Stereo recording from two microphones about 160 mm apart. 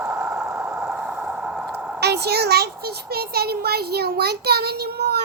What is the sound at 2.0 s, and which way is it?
A child's voice, 90° right.